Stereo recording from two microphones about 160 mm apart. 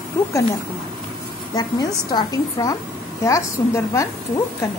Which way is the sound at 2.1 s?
25° left (ahead or behind).